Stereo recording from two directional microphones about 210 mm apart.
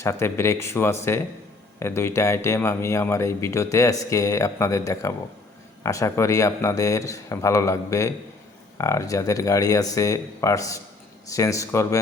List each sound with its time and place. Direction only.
0.0 s a man's voice: 15° left (ahead or behind)